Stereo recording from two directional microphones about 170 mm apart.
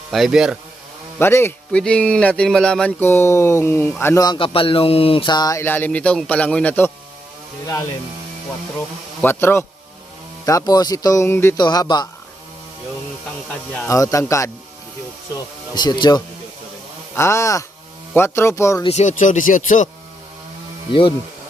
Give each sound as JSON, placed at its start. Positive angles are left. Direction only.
{"t": 0.1, "sound": "speech", "side_deg": 0}
{"t": 1.2, "sound": "speech", "side_deg": 15}
{"t": 9.2, "sound": "speech", "side_deg": 10}
{"t": 13.5, "sound": "speech", "side_deg": 10}
{"t": 13.9, "sound": "speech", "side_deg": 20}
{"t": 15.7, "sound": "speech", "side_deg": 25}
{"t": 18.9, "sound": "speech", "side_deg": 45}